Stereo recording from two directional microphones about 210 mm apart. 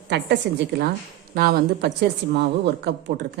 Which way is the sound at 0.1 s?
55° right (ahead or behind).